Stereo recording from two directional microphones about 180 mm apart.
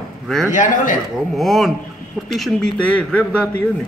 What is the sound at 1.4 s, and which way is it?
A man's voice, centre (ahead or behind).